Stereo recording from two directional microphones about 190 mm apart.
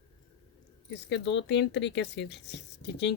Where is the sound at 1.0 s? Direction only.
65° left (ahead or behind).